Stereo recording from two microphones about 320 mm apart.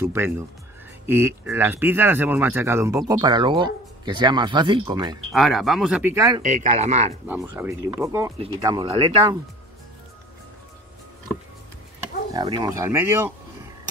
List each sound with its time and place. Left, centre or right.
0.0 s speech: centre
5.3 s speech: centre
6.4 s speech: right
7.2 s speech: centre
12.3 s speech: centre